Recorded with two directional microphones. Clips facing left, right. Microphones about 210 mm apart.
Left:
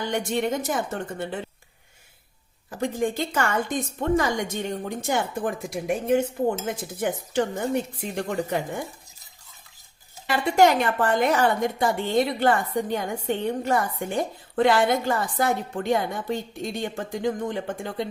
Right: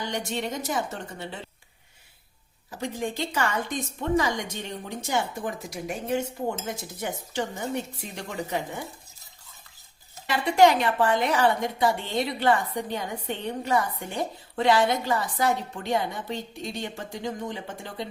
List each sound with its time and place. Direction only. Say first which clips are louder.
0.1 s a woman's voice: left 5 dB; 55° left (ahead or behind)
2.6 s a woman's voice: left 5 dB; 50° left (ahead or behind)
6.7 s a woman's voice: left 5 dB; 55° left (ahead or behind)
10.2 s a woman's voice: even; 50° left (ahead or behind)